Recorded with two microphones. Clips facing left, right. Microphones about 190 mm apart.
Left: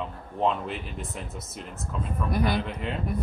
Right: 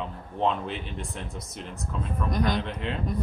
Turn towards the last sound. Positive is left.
turn(degrees=5)  # may be behind; listen again after turning